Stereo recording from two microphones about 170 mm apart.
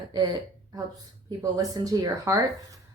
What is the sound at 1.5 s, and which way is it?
A woman's voice, 20° right (ahead or behind).